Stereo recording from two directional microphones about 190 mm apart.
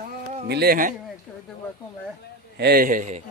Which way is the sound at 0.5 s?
55° right (ahead or behind).